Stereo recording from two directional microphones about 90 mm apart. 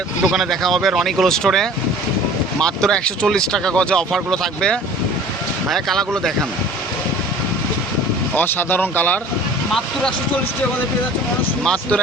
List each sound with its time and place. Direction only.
0.3 s speech: centre (ahead or behind)
8.4 s speech: 20° left (ahead or behind)
11.6 s speech: 10° left (ahead or behind)